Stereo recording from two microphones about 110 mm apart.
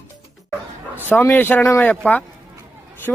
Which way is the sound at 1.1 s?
20° left (ahead or behind).